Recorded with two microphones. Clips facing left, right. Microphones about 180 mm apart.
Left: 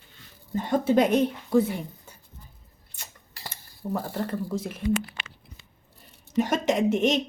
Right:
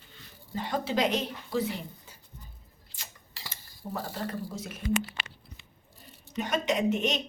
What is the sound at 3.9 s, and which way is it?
Speech, 55° left (ahead or behind).